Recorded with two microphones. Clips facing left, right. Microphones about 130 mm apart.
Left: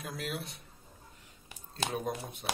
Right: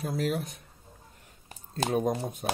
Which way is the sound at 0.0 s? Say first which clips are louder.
Right 9 dB; 35° right (ahead or behind).